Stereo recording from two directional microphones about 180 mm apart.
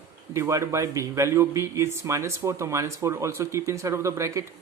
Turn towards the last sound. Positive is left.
turn(degrees=-15)  # may be behind; listen again after turning